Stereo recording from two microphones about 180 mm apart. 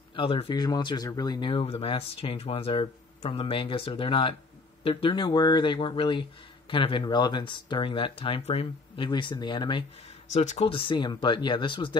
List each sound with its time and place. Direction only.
0.1 s speech: 30° left (ahead or behind)
10.3 s speech: 40° left (ahead or behind)